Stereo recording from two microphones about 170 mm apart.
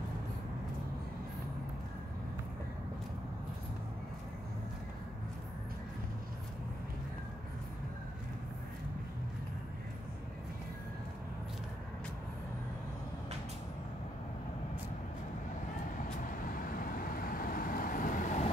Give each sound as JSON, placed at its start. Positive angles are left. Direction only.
{"t": 16.3, "sound": "vehicle", "side_deg": 55}